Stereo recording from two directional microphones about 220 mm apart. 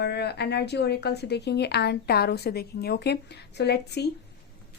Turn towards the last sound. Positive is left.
turn(degrees=50)  # may be behind; listen again after turning